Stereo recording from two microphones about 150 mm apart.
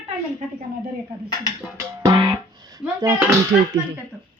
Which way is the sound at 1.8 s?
20° right (ahead or behind).